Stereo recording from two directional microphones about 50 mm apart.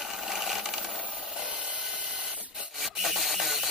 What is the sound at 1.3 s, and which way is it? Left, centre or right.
Printer, right.